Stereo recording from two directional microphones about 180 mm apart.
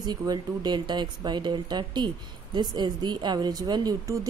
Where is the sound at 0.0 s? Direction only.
20° right (ahead or behind).